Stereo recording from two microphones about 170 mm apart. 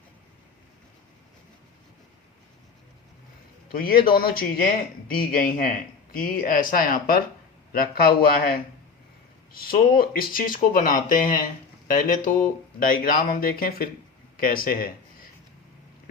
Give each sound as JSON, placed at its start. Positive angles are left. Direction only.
{"t": 3.8, "sound": "speech", "side_deg": 60}
{"t": 9.5, "sound": "speech", "side_deg": 60}